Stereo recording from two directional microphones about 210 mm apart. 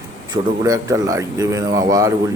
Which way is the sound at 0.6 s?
15° right (ahead or behind).